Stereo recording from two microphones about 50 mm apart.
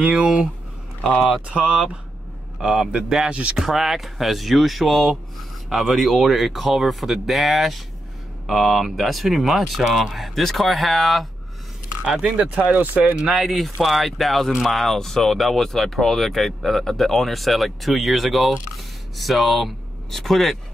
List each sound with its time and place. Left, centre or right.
0.1 s speech: right
1.5 s speech: centre
3.5 s speech: centre
12.3 s speech: right
13.2 s speech: centre